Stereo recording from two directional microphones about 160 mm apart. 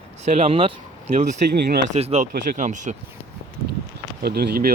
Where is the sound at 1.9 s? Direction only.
40° right (ahead or behind).